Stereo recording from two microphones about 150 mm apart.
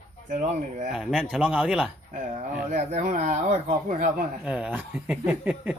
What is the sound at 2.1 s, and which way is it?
Speech, 60° right (ahead or behind).